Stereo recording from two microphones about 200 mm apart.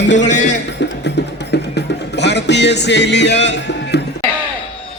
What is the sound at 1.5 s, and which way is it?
Music, 55° left (ahead or behind).